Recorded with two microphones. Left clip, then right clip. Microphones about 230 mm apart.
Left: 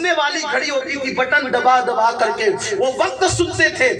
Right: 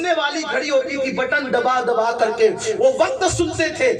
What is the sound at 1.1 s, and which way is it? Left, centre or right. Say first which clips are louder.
A woman's voice: left 4 dB; right.